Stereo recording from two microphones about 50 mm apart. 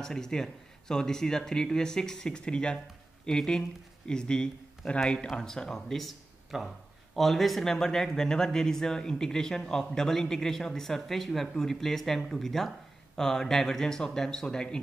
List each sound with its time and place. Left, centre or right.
0.0 s speech: centre